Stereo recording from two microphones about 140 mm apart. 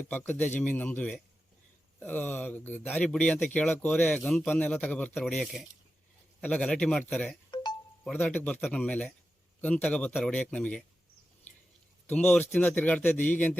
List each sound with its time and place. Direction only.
0.1 s a man's voice: 15° left (ahead or behind)
7.5 s music: 30° left (ahead or behind)
8.2 s a man's voice: 15° left (ahead or behind)
12.0 s a man's voice: 10° left (ahead or behind)